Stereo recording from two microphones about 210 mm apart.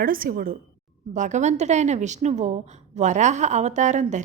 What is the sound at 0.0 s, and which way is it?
A woman's voice, 40° right (ahead or behind).